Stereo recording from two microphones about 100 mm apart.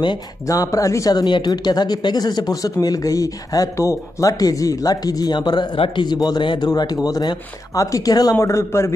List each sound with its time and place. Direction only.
0.5 s speech: 35° left (ahead or behind)